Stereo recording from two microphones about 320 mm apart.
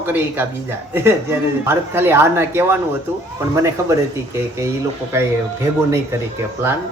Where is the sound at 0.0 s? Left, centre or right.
Centre.